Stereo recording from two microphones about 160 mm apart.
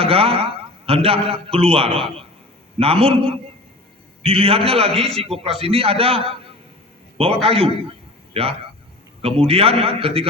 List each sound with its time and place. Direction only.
0.0 s a man's voice: 35° right (ahead or behind)
7.4 s a man's voice: 35° right (ahead or behind)